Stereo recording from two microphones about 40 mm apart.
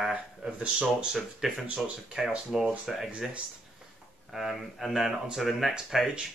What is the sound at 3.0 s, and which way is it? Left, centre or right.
Speech, right.